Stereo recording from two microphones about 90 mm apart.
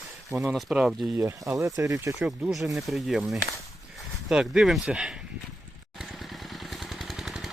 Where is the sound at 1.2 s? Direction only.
35° right (ahead or behind).